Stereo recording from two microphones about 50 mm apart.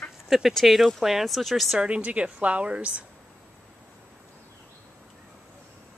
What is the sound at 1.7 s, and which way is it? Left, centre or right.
Speech, centre.